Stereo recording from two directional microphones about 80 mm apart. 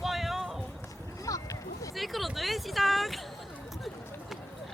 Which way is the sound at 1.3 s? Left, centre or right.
Left.